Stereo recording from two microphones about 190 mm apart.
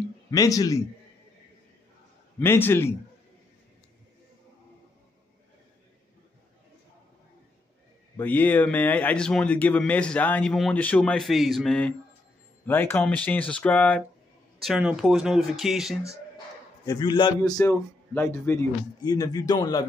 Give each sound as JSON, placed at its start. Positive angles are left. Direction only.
{"t": 0.3, "sound": "speech", "side_deg": 20}
{"t": 2.4, "sound": "speech", "side_deg": 10}
{"t": 8.2, "sound": "speech", "side_deg": 10}
{"t": 16.8, "sound": "a man's voice", "side_deg": 20}